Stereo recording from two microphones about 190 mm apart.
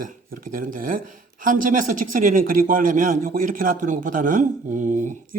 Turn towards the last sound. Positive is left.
turn(degrees=-40)  # may be behind; listen again after turning